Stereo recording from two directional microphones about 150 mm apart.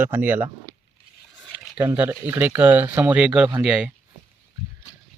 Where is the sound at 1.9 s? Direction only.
10° right (ahead or behind).